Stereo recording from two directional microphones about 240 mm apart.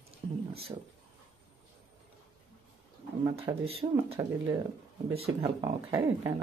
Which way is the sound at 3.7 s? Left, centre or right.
Right.